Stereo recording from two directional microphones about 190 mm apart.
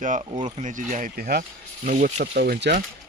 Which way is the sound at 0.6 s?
40° right (ahead or behind).